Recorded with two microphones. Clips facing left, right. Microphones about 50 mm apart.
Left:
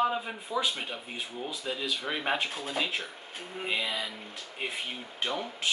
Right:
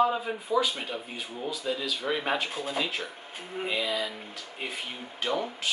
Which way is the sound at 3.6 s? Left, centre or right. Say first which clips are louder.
Right 2 dB; centre.